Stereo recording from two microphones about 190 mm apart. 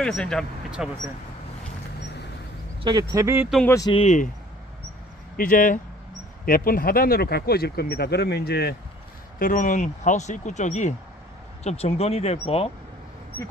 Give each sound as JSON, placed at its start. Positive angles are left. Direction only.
{"t": 0.0, "sound": "speech", "side_deg": 5}
{"t": 2.8, "sound": "speech", "side_deg": -20}
{"t": 3.6, "sound": "speech", "side_deg": 15}
{"t": 3.9, "sound": "speech", "side_deg": 35}
{"t": 5.4, "sound": "speech", "side_deg": 45}
{"t": 9.4, "sound": "speech", "side_deg": 45}